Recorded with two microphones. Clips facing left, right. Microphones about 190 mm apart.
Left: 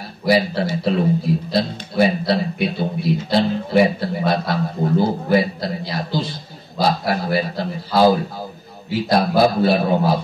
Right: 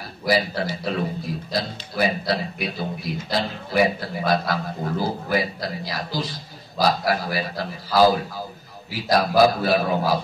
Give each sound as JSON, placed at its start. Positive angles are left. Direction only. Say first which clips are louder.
{"t": 0.3, "sound": "a man's voice", "louder": "left 5 dB", "side_deg": 25}